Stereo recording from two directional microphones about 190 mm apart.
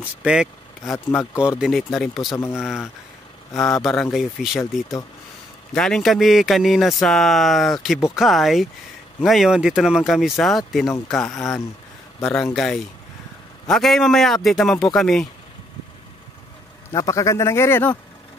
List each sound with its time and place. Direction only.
0.2 s speech: 5° right (ahead or behind)
0.8 s a man's voice: 15° left (ahead or behind)
1.6 s speech: centre (ahead or behind)
2.2 s a man's voice: 15° left (ahead or behind)
3.5 s a man's voice: centre (ahead or behind)
16.9 s a man's voice: 20° left (ahead or behind)